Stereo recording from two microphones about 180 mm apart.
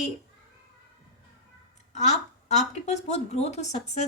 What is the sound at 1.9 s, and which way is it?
A woman's voice, 40° left (ahead or behind).